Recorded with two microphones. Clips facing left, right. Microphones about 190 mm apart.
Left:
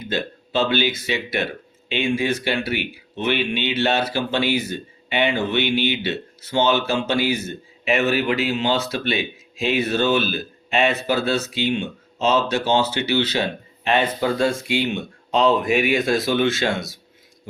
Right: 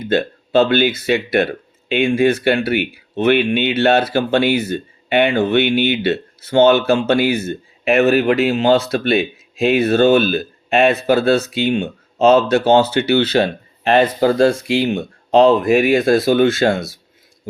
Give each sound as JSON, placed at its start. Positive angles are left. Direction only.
{"t": 0.1, "sound": "speech", "side_deg": -55}
{"t": 13.8, "sound": "speech", "side_deg": -40}